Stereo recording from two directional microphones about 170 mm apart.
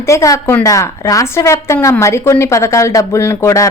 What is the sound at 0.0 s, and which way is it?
A woman's voice, 15° left (ahead or behind).